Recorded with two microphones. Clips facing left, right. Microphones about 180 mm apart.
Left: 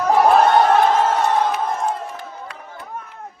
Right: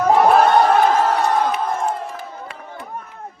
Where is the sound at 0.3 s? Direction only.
Centre (ahead or behind).